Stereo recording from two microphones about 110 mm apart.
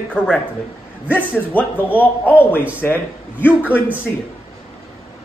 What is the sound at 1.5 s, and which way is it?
A man's voice, 15° left (ahead or behind).